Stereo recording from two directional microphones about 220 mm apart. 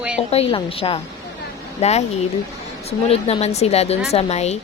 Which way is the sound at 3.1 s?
30° left (ahead or behind).